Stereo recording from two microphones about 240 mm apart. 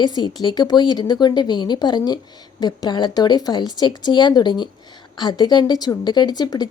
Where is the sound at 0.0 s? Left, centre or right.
Centre.